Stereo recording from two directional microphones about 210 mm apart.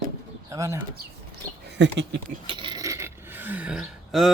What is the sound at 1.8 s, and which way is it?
Speech, 60° right (ahead or behind).